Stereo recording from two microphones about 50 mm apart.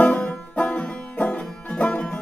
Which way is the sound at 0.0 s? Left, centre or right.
Left.